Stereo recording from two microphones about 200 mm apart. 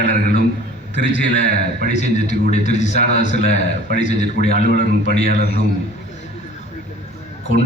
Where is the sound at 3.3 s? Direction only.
50° right (ahead or behind).